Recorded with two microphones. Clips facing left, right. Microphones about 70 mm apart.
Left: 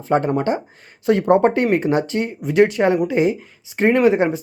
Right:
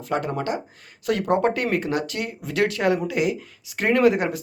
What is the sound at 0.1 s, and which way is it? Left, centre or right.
Speech, left.